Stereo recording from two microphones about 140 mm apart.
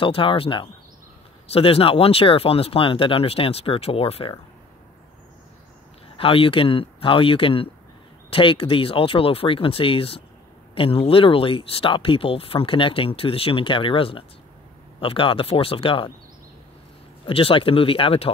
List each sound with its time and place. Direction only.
0.0 s speech: 40° left (ahead or behind)
6.1 s speech: 40° left (ahead or behind)
17.3 s speech: 40° left (ahead or behind)